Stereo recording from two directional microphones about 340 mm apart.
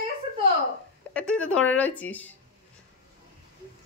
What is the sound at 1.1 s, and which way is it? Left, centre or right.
A woman's voice, centre.